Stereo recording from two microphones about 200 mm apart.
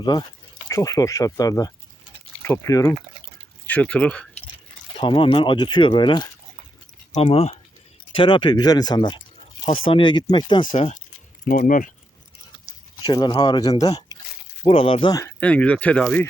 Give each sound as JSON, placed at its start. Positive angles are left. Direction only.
{"t": 0.0, "sound": "speech", "side_deg": 20}
{"t": 3.7, "sound": "speech", "side_deg": 5}
{"t": 4.9, "sound": "speech", "side_deg": 25}
{"t": 11.4, "sound": "speech", "side_deg": 40}
{"t": 13.0, "sound": "speech", "side_deg": 20}
{"t": 15.4, "sound": "speech", "side_deg": 5}